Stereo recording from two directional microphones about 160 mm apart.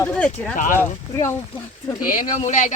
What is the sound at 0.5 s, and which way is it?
Speech, 55° left (ahead or behind).